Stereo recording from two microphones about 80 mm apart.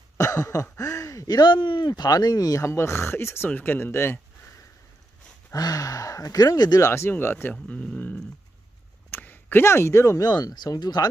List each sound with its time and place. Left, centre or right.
0.2 s speech: left
2.6 s speech: left
5.5 s speech: left
6.8 s speech: left
7.6 s speech: centre; by 10.2 s left
10.2 s speech: left